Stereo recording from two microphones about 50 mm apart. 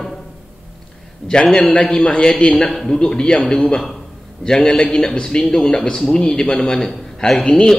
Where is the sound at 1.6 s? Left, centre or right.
Left.